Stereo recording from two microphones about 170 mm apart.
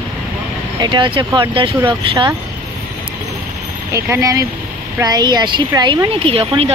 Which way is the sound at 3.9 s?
20° right (ahead or behind).